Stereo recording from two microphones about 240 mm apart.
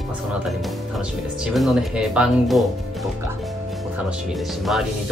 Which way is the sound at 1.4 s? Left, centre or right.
Centre.